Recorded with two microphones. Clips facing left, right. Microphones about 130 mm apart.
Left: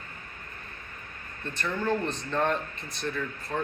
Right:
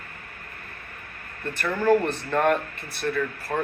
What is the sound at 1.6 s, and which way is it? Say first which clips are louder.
Speech: right 8 dB; 70° right (ahead or behind).